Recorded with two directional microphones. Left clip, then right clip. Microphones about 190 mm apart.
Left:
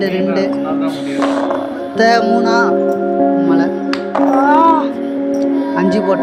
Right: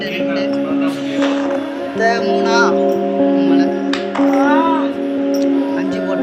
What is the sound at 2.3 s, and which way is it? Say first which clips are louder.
Speech: left 1 dB; 25° left (ahead or behind).